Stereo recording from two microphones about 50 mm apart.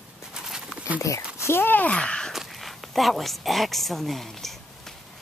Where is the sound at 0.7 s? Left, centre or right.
Right.